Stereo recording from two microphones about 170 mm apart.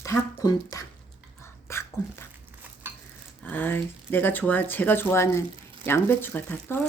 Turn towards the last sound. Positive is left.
turn(degrees=10)  # may be behind; listen again after turning